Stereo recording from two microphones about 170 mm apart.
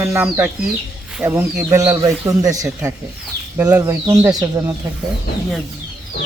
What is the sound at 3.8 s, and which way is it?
Speech, 20° right (ahead or behind).